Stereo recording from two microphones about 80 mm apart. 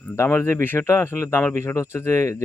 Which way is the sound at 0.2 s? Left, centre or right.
Left.